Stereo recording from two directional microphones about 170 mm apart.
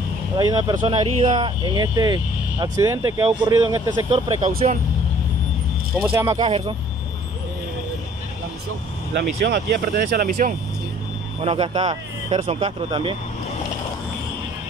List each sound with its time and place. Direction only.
0.4 s speech: 25° right (ahead or behind)
4.4 s speech: 40° right (ahead or behind)
5.9 s speech: 20° right (ahead or behind)
9.1 s speech: 70° right (ahead or behind); by 10.5 s 55° right (ahead or behind)
11.4 s speech: 30° right (ahead or behind)